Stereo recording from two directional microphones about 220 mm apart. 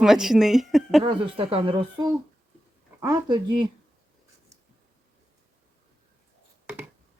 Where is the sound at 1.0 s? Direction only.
25° right (ahead or behind).